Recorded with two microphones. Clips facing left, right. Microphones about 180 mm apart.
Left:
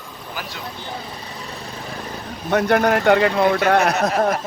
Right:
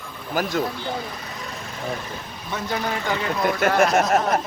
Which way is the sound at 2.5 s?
65° left (ahead or behind).